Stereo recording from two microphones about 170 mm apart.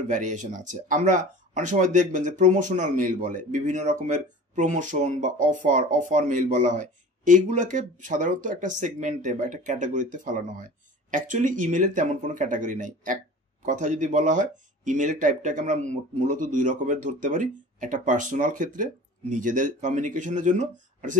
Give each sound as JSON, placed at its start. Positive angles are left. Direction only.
{"t": 0.1, "sound": "speech", "side_deg": -50}